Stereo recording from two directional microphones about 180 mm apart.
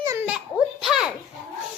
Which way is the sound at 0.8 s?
5° right (ahead or behind).